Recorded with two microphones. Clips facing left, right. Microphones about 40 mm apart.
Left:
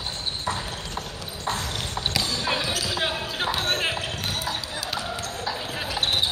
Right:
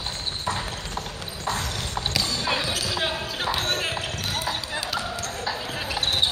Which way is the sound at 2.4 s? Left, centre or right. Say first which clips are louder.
Even; centre.